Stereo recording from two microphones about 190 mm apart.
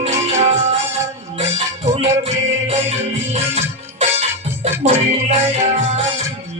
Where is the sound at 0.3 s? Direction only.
35° right (ahead or behind).